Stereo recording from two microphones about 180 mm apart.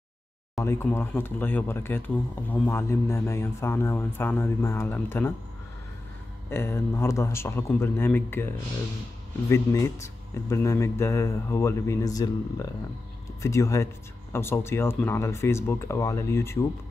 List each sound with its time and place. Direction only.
0.6 s a man's voice: 15° left (ahead or behind)
6.5 s a man's voice: 15° left (ahead or behind)